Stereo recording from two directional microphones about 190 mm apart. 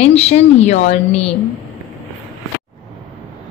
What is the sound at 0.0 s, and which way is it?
A woman's voice, 35° left (ahead or behind).